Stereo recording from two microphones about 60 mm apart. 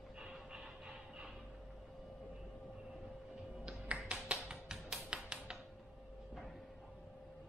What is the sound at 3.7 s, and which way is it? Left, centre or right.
Music, centre.